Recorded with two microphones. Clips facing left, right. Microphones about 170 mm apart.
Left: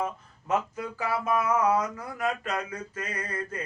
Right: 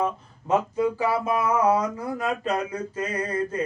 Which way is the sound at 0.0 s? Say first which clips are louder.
Right 5 dB; 30° right (ahead or behind).